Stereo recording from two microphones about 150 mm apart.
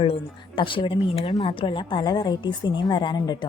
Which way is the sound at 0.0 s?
35° left (ahead or behind).